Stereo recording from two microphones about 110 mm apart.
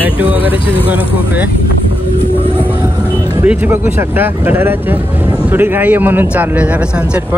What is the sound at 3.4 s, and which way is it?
A man's voice, 15° right (ahead or behind).